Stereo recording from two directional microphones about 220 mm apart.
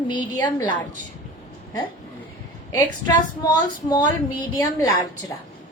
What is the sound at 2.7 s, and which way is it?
Speech, 15° left (ahead or behind).